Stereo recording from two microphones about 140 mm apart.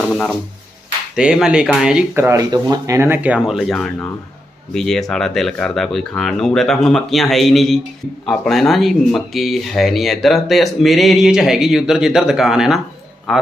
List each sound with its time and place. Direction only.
0.0 s speech: centre (ahead or behind)
2.1 s speech: 20° right (ahead or behind); by 13.4 s centre (ahead or behind)